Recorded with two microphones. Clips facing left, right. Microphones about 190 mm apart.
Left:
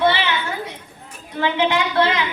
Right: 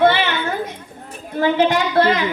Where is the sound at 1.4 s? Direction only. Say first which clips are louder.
Right 3 dB; 45° right (ahead or behind).